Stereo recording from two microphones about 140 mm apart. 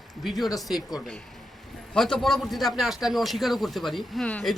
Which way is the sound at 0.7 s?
25° left (ahead or behind).